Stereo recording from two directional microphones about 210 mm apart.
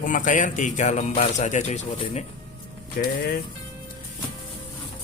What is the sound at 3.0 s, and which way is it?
Speech, 45° left (ahead or behind).